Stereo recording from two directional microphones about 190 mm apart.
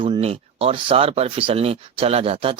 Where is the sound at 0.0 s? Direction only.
30° right (ahead or behind).